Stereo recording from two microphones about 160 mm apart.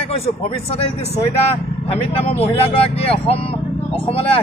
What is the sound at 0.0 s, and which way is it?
Speech, 35° left (ahead or behind).